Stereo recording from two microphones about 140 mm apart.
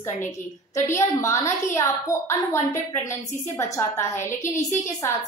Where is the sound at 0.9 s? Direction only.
20° left (ahead or behind).